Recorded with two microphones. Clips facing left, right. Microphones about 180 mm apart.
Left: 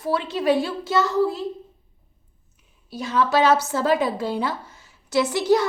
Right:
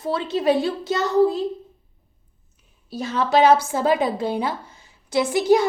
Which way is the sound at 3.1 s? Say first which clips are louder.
Right 2 dB; 20° right (ahead or behind).